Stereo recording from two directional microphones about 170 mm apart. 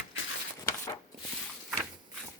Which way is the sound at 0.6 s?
20° left (ahead or behind).